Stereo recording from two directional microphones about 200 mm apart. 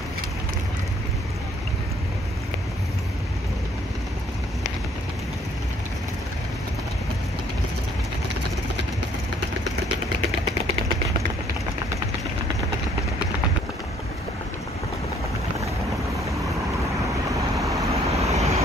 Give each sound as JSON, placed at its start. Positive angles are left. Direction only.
{"t": 17.6, "sound": "vehicle", "side_deg": -15}
{"t": 18.0, "sound": "vehicle", "side_deg": -30}